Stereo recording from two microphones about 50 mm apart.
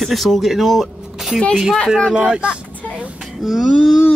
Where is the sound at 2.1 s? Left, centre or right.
Centre.